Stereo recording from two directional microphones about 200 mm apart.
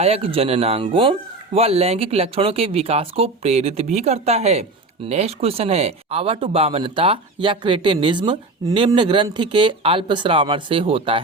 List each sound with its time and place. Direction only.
0.0 s speech: 30° right (ahead or behind)